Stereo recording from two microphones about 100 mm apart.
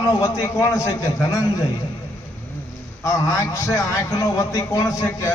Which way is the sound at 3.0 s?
30° left (ahead or behind).